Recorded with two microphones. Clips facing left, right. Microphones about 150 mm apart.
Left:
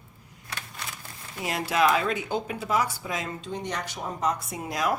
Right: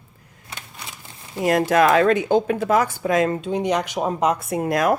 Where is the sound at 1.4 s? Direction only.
50° right (ahead or behind).